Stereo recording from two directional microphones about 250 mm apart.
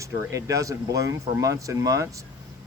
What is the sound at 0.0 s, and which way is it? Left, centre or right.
Speech, centre.